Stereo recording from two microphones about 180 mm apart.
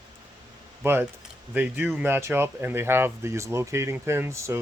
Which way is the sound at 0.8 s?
10° right (ahead or behind).